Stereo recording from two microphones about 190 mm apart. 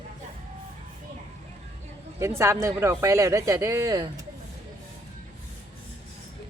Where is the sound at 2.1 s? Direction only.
15° right (ahead or behind).